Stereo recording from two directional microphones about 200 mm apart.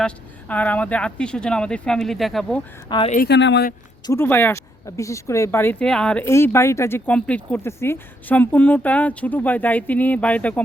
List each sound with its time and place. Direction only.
0.0 s speech: 5° left (ahead or behind)
2.9 s a woman's voice: 20° left (ahead or behind)
3.2 s speech: 60° left (ahead or behind)
4.0 s speech: 15° left (ahead or behind)